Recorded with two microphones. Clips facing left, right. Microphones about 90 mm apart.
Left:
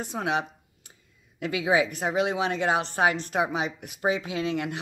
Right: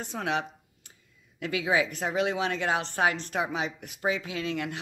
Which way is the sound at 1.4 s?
20° left (ahead or behind).